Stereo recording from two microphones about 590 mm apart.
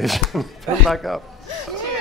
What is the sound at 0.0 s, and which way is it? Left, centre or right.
Speech, centre.